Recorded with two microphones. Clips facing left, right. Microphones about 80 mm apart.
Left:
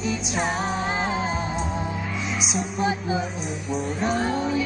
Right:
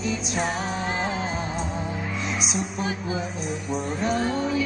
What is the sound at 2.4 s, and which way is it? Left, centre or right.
Speech, centre.